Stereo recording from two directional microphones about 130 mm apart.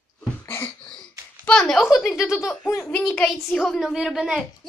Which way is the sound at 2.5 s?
15° left (ahead or behind).